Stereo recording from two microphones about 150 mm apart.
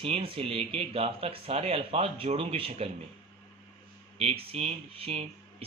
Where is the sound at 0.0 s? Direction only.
40° right (ahead or behind).